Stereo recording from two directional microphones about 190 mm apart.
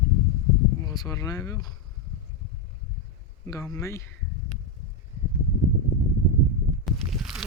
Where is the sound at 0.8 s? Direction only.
20° left (ahead or behind).